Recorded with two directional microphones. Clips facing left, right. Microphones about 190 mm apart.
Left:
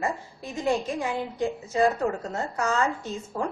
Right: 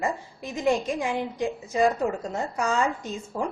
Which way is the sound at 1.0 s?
15° right (ahead or behind).